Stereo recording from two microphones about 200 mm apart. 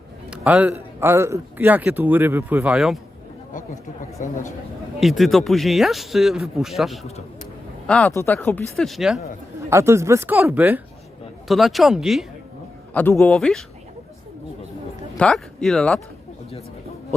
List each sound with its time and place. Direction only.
0.3 s a man's voice: 5° right (ahead or behind)
4.2 s speech: 40° left (ahead or behind)
4.9 s a man's voice: centre (ahead or behind)
9.6 s a man's voice: 15° right (ahead or behind); by 13.7 s centre (ahead or behind)
15.2 s speech: 5° left (ahead or behind)